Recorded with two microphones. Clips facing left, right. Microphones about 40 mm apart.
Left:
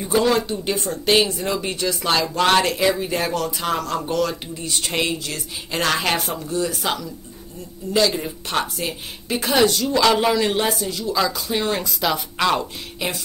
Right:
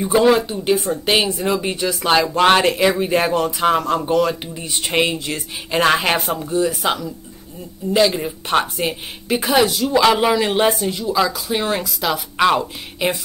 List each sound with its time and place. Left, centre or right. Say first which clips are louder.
0.0 s speech: right 4 dB; centre
9.4 s speech: right 1 dB; centre
9.8 s speech: right 3 dB; right
10.7 s speech: right 4 dB; right
11.0 s speech: right 3 dB; centre
12.4 s speech: right 8 dB; centre